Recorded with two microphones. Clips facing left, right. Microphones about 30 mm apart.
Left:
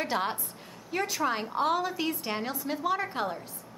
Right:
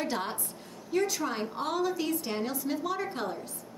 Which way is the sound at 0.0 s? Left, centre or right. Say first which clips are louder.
Left 3 dB; centre.